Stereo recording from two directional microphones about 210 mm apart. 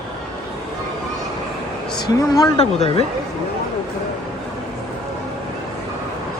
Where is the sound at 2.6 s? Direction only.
30° left (ahead or behind).